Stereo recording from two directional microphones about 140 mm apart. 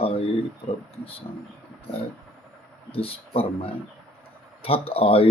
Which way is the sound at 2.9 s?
40° left (ahead or behind).